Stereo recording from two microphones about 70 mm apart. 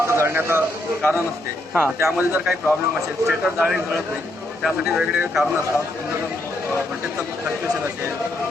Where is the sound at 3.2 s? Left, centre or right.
Centre.